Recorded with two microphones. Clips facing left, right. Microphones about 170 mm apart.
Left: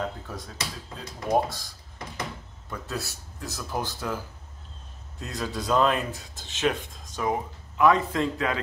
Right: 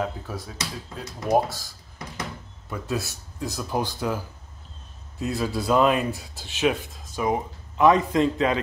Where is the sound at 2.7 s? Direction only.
15° right (ahead or behind).